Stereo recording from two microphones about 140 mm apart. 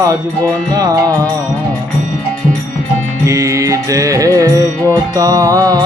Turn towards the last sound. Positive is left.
turn(degrees=-25)  # may be behind; listen again after turning